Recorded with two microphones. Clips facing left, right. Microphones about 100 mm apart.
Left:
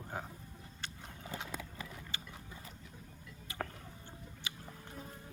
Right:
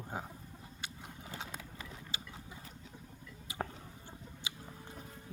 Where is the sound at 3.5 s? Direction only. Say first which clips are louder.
Right 1 dB; 15° right (ahead or behind).